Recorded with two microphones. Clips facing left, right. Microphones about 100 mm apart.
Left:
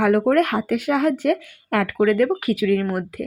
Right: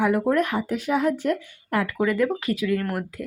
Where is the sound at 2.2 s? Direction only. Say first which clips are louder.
Left 3 dB; 15° left (ahead or behind).